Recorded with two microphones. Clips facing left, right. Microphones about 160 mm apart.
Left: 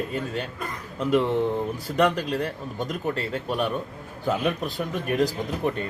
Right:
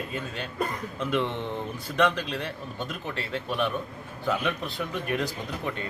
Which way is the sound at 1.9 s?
40° left (ahead or behind).